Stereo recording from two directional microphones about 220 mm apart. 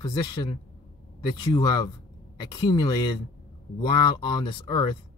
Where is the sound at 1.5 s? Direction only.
20° left (ahead or behind).